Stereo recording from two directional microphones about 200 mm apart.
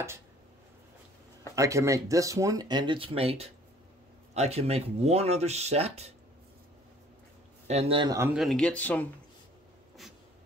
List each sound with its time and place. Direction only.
1.5 s speech: 15° right (ahead or behind); by 6.1 s 30° right (ahead or behind)
7.6 s speech: 30° right (ahead or behind)
8.3 s speech: centre (ahead or behind)